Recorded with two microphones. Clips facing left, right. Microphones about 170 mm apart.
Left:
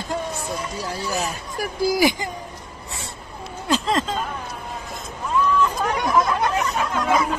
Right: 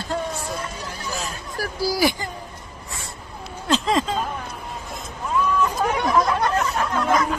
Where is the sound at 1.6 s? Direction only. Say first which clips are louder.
Left 2 dB; 20° left (ahead or behind).